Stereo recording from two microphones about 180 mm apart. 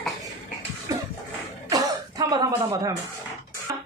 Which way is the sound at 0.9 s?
20° right (ahead or behind).